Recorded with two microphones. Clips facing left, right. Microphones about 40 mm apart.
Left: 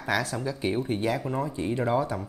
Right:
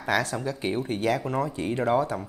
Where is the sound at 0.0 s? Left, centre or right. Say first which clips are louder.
Right 2 dB; right.